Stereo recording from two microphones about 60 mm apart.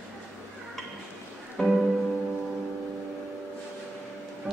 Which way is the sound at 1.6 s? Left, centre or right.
Centre.